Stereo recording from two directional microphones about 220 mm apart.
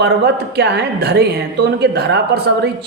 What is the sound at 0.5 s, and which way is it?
Speech, 50° right (ahead or behind).